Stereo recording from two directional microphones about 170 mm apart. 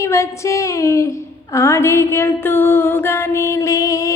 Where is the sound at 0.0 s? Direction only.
15° left (ahead or behind).